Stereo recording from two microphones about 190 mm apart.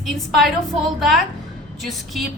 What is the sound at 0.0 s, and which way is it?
A woman's voice, centre (ahead or behind).